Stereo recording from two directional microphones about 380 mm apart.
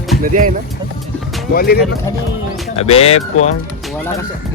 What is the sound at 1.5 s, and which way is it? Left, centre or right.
Speech, left.